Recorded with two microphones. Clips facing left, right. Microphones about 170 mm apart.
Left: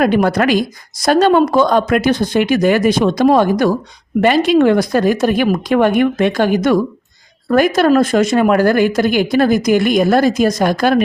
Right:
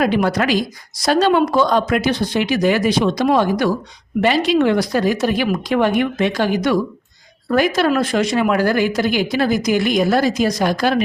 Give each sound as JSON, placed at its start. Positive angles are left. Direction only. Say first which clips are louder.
{"t": 0.0, "sound": "speech", "louder": "left 4 dB", "side_deg": 50}